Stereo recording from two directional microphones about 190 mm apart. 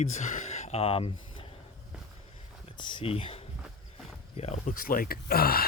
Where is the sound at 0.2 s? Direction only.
40° left (ahead or behind).